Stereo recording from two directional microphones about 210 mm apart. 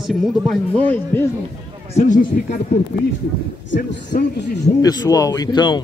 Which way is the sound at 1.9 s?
35° left (ahead or behind).